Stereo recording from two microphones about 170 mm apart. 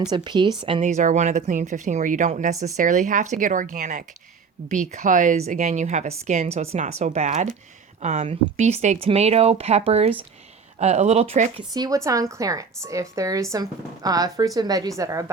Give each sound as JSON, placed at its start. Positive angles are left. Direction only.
{"t": 0.1, "sound": "a woman's voice", "side_deg": -25}
{"t": 0.9, "sound": "speech", "side_deg": -45}
{"t": 11.7, "sound": "a woman's voice", "side_deg": -20}